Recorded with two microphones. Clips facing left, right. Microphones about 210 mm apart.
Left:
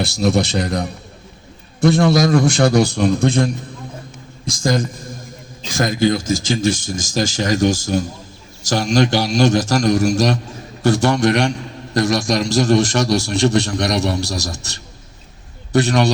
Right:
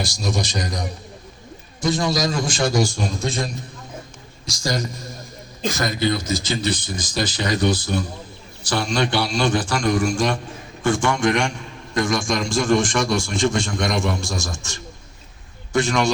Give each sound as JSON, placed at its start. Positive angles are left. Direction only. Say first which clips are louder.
{"t": 0.0, "sound": "a man's voice", "louder": "left 8 dB", "side_deg": 60}